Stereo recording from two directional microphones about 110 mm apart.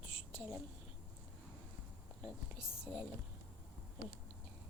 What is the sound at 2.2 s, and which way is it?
Speech, 10° right (ahead or behind).